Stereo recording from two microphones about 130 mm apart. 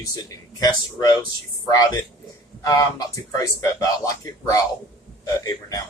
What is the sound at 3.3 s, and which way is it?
Speech, 25° left (ahead or behind).